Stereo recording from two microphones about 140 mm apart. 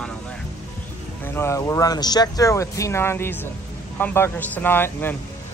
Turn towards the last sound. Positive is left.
turn(degrees=15)  # may be behind; listen again after turning